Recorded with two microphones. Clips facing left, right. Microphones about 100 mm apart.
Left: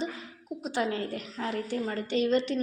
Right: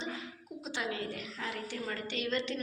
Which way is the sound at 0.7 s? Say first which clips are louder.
Left 7 dB; 40° left (ahead or behind).